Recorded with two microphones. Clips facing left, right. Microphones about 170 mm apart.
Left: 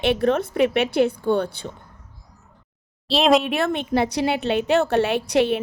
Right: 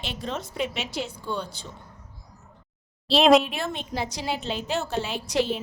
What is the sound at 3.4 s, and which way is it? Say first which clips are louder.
A woman's voice: left 9 dB; 65° left (ahead or behind).